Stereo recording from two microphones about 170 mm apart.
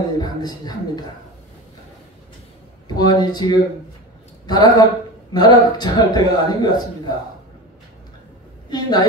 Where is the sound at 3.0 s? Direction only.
25° left (ahead or behind).